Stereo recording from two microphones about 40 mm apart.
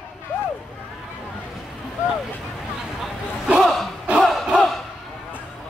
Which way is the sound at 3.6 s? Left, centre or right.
Centre.